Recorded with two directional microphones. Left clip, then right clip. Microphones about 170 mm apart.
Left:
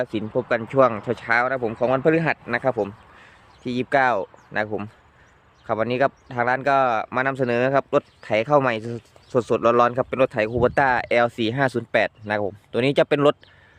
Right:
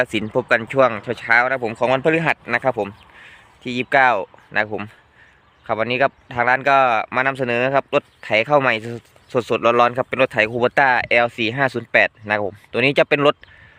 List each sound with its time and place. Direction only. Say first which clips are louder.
0.0 s speech: right 5 dB; 10° right (ahead or behind)
0.8 s speech: right 2 dB; 10° left (ahead or behind)